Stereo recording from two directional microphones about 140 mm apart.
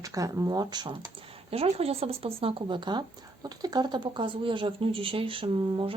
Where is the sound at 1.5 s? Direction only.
45° right (ahead or behind).